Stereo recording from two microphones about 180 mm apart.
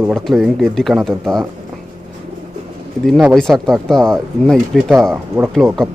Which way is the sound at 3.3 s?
Centre (ahead or behind).